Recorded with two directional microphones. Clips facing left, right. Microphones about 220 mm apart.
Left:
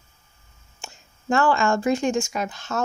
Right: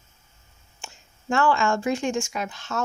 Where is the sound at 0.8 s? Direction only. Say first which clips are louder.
Left 2 dB; 40° left (ahead or behind).